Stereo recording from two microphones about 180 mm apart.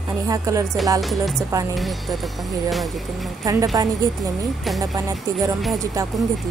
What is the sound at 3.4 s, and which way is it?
Speech, 20° right (ahead or behind).